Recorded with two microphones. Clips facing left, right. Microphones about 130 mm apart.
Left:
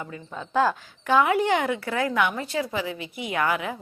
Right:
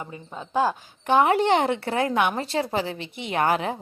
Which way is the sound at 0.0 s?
25° right (ahead or behind).